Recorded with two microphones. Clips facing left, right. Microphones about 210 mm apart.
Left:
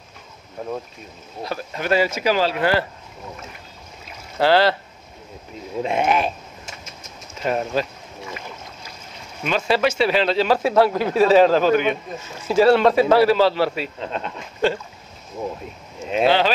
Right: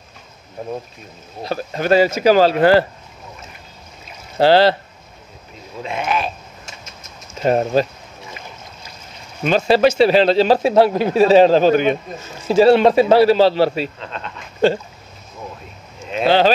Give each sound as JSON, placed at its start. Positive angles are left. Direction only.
{"t": 1.4, "sound": "speech", "side_deg": -35}
{"t": 4.4, "sound": "a man's voice", "side_deg": -30}
{"t": 5.9, "sound": "speech", "side_deg": 20}
{"t": 7.4, "sound": "speech", "side_deg": -35}
{"t": 9.4, "sound": "a man's voice", "side_deg": -35}
{"t": 14.0, "sound": "speech", "side_deg": 10}
{"t": 16.3, "sound": "speech", "side_deg": -35}